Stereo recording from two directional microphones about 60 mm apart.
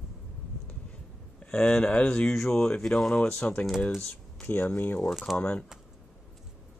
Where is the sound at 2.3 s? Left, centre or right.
Centre.